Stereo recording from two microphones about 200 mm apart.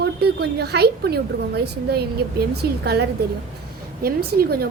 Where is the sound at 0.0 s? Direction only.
55° right (ahead or behind).